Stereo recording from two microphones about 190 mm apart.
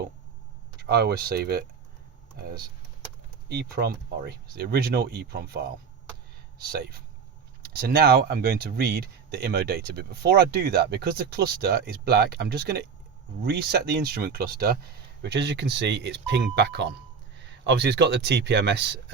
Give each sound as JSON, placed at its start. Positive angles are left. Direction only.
{"t": 0.8, "sound": "speech", "side_deg": -60}
{"t": 3.5, "sound": "speech", "side_deg": -60}